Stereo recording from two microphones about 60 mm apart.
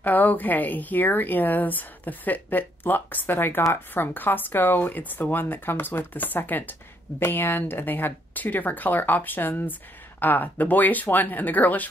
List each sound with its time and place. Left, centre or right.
0.0 s speech: left